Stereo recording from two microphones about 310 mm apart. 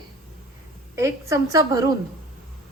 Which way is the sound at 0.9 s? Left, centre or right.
Centre.